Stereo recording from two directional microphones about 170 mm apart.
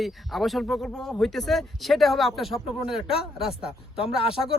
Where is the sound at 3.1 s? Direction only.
35° left (ahead or behind).